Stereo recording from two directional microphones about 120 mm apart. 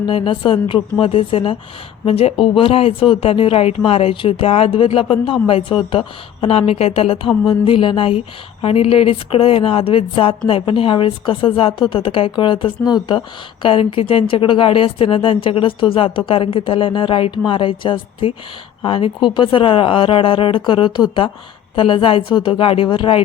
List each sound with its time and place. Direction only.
0.0 s a woman's voice: 45° left (ahead or behind)